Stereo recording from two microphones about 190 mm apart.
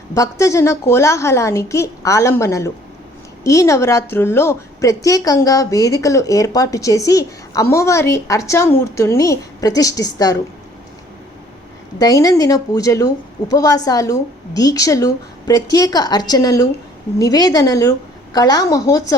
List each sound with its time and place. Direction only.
0.1 s a woman's voice: 15° left (ahead or behind)
11.9 s a woman's voice: 20° left (ahead or behind)